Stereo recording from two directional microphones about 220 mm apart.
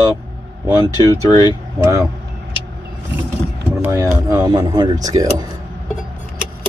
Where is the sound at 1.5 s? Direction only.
15° right (ahead or behind).